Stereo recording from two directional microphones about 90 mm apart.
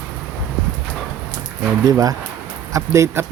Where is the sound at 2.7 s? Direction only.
35° right (ahead or behind).